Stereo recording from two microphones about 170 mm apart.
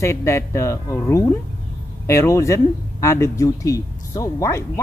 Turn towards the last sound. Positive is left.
turn(degrees=20)  # may be behind; listen again after turning